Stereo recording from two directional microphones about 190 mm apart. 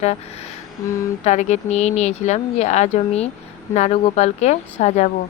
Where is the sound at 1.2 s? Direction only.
40° left (ahead or behind).